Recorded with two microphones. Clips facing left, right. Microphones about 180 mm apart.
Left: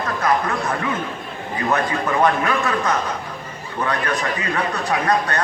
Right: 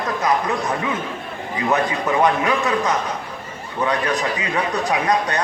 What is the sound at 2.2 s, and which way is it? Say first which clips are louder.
Speech: even; 15° right (ahead or behind).